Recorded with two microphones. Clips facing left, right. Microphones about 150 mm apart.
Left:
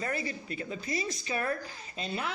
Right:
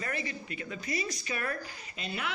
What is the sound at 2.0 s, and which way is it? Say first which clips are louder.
Speech: left 3 dB; 35° left (ahead or behind).